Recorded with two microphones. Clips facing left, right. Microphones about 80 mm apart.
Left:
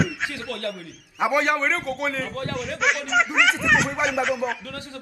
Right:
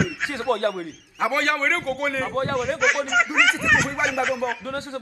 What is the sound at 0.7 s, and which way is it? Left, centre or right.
Speech, right.